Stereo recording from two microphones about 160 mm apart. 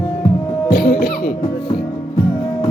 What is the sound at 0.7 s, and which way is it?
Music, 75° left (ahead or behind).